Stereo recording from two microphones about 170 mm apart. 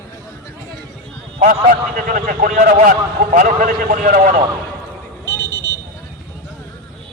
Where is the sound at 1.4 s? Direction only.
55° right (ahead or behind).